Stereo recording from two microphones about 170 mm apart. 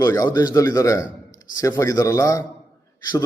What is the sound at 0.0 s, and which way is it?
A man's voice, 20° left (ahead or behind).